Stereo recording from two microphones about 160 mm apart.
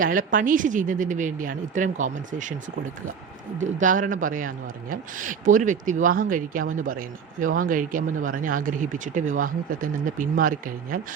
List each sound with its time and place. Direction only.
0.0 s a woman's voice: 55° right (ahead or behind)
3.6 s a man's voice: 55° right (ahead or behind)